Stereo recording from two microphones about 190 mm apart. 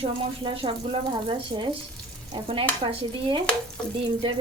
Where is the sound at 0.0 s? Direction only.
30° right (ahead or behind).